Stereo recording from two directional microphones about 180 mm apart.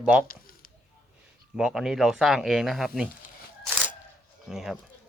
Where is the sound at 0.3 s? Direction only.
50° left (ahead or behind).